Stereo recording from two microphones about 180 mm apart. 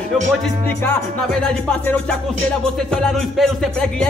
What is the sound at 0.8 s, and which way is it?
Music, 5° left (ahead or behind).